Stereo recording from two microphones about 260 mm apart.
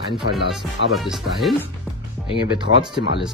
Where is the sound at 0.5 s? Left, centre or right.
Centre.